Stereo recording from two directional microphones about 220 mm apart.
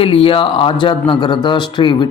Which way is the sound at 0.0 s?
25° left (ahead or behind).